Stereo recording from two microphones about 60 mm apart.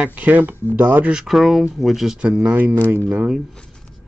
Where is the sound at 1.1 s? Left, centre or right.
Centre.